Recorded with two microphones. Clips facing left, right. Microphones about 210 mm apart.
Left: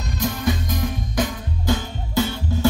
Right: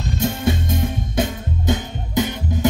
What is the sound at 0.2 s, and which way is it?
Music, 25° right (ahead or behind).